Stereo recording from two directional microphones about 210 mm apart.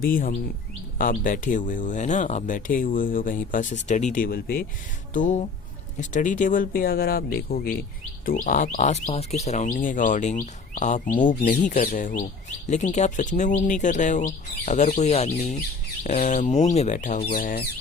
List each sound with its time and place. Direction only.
0.0 s speech: 40° left (ahead or behind)